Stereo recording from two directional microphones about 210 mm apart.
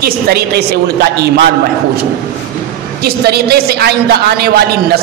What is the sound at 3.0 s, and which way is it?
A woman's voice, 50° right (ahead or behind).